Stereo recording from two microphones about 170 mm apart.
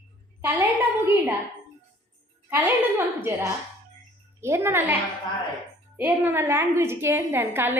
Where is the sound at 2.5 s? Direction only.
15° right (ahead or behind).